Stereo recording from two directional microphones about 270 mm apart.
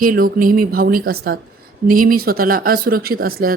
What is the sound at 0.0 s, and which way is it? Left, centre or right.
Speech, right.